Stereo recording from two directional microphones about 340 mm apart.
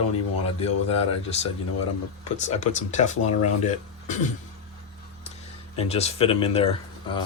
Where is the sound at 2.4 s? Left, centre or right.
Left.